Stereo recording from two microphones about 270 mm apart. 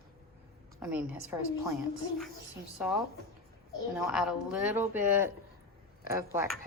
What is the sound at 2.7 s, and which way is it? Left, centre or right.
Speech, centre.